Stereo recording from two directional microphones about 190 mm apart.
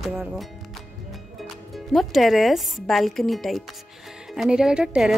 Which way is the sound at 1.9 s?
Centre (ahead or behind).